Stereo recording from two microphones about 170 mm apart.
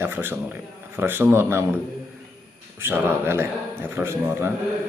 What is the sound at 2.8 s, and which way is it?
Speech, 15° right (ahead or behind).